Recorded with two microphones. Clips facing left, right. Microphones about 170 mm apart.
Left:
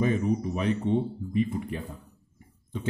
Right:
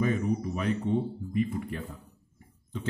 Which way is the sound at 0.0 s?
25° left (ahead or behind).